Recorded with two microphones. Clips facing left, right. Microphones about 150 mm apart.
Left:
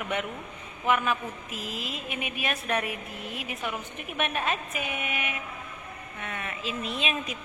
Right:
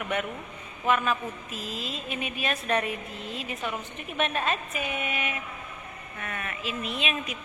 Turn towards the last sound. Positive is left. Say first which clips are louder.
# even
turn(degrees=35)  # may be behind; listen again after turning